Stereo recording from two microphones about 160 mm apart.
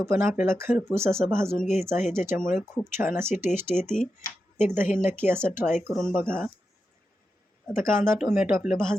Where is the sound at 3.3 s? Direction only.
50° left (ahead or behind).